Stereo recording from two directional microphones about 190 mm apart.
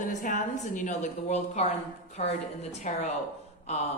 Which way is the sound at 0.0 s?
40° left (ahead or behind).